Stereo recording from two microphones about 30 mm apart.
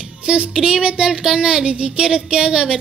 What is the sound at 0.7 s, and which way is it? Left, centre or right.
Speech, right.